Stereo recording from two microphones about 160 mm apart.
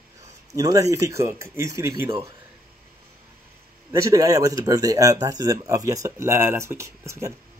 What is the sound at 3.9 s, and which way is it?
Speech, 20° right (ahead or behind).